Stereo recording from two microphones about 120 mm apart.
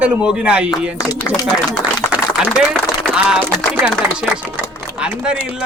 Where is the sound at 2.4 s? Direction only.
5° right (ahead or behind).